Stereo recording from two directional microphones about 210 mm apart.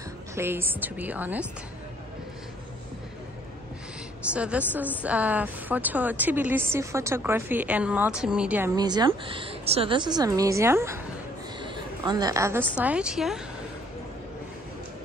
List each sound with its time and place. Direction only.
0.4 s a woman's voice: 10° right (ahead or behind)
4.3 s a woman's voice: 5° right (ahead or behind)
8.7 s a woman's voice: 20° right (ahead or behind); by 13.4 s centre (ahead or behind)